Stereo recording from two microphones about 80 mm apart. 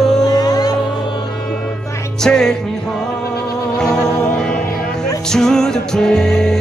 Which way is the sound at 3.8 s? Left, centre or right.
Centre.